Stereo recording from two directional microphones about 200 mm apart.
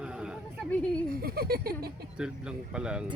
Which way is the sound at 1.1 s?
50° right (ahead or behind).